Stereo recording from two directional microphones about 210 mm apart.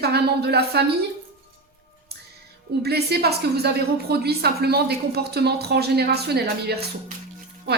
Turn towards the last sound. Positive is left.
turn(degrees=-50)  # may be behind; listen again after turning